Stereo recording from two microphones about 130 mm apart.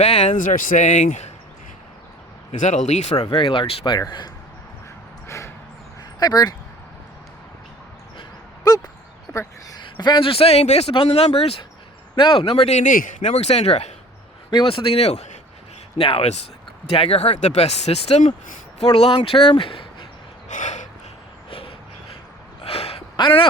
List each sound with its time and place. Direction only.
0.0 s speech: 60° left (ahead or behind)
2.5 s speech: 70° left (ahead or behind)
3.2 s speech: 35° left (ahead or behind)
6.1 s speech: 30° left (ahead or behind)
9.3 s a sound: 20° left (ahead or behind)
9.7 s speech: 35° left (ahead or behind); by 13.9 s 55° left (ahead or behind)
14.5 s speech: 40° left (ahead or behind); by 15.4 s 55° left (ahead or behind)
16.0 s speech: 45° left (ahead or behind); by 18.9 s 65° left (ahead or behind)
18.9 s speech: 50° left (ahead or behind)
20.5 s gasp: 70° left (ahead or behind)
21.5 s a sound: 45° left (ahead or behind)
23.1 s a sound: 40° left (ahead or behind)